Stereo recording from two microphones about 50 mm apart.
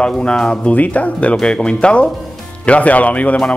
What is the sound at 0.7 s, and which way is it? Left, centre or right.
Speech, left.